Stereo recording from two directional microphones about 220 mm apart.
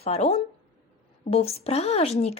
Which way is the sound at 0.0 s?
30° left (ahead or behind).